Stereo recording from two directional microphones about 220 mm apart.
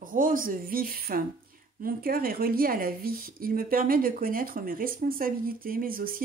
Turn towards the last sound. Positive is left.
turn(degrees=-40)  # may be behind; listen again after turning